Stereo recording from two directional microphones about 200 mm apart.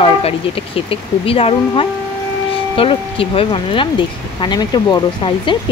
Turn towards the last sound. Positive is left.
turn(degrees=25)  # may be behind; listen again after turning